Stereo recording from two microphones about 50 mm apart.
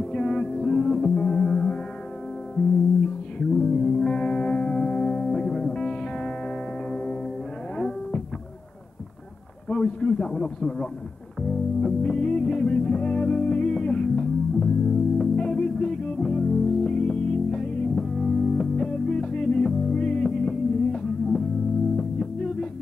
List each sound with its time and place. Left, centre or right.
0.0 s music: centre
3.3 s music: centre
9.7 s a sound: centre
11.4 s music: centre